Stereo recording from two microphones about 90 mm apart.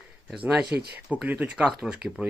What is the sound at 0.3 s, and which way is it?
Speech, 10° right (ahead or behind).